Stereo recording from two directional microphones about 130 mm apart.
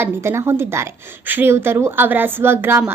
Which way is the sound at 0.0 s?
20° right (ahead or behind).